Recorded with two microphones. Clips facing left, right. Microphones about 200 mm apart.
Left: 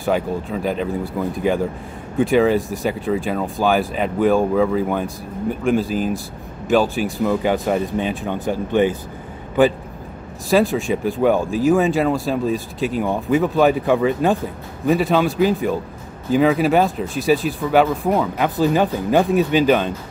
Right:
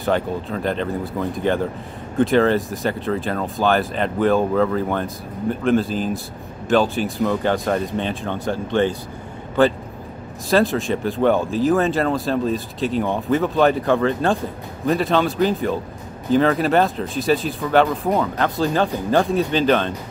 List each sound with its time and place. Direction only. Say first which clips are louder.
0.0 s speech: left 1 dB; 5° left (ahead or behind)
10.6 s speech: left 1 dB; centre (ahead or behind)
18.4 s speech: left 2 dB; 15° left (ahead or behind)